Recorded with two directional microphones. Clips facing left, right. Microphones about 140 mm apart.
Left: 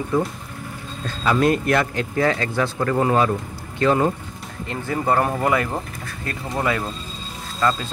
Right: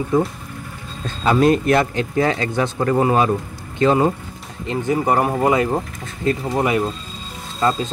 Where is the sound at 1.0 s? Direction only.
25° right (ahead or behind).